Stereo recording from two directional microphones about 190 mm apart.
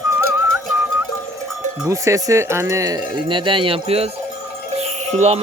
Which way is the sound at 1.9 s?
15° right (ahead or behind).